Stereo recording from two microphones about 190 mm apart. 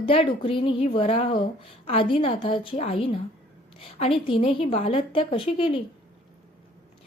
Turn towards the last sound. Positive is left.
turn(degrees=30)  # may be behind; listen again after turning